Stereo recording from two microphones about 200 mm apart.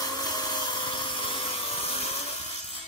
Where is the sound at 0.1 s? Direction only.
20° left (ahead or behind).